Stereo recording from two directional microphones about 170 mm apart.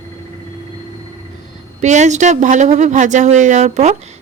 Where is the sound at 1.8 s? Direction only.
45° right (ahead or behind).